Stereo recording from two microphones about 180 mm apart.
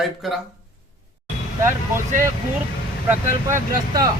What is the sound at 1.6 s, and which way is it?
Speech, 15° right (ahead or behind).